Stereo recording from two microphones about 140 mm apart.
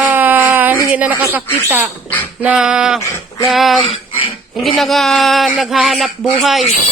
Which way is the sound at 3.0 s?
20° left (ahead or behind).